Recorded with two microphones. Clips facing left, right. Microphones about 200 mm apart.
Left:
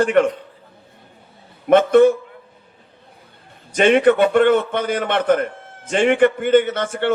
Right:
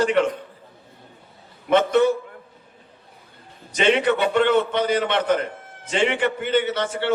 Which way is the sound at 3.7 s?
50° left (ahead or behind).